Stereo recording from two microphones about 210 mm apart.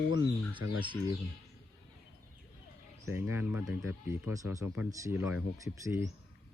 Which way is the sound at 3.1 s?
10° right (ahead or behind).